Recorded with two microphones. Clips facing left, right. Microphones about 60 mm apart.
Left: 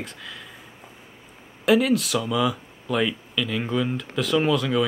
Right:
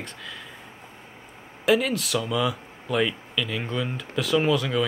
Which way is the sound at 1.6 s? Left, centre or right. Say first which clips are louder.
Left 3 dB; centre.